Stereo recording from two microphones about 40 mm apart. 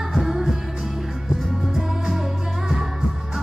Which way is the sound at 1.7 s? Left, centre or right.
Centre.